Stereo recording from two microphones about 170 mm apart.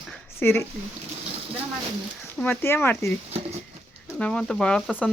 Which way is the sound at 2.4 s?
10° left (ahead or behind).